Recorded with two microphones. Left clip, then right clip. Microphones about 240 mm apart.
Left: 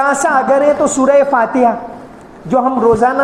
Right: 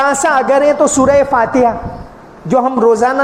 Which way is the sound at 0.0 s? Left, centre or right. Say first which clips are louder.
Right 1 dB; right.